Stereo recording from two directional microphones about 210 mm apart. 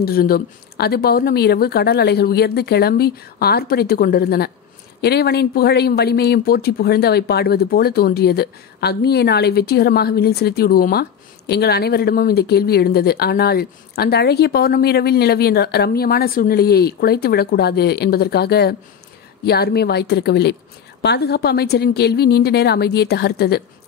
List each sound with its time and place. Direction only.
0.0 s speech: 45° left (ahead or behind)